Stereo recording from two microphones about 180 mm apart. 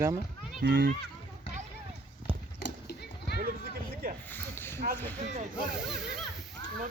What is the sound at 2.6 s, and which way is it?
Clip-clop, 65° left (ahead or behind).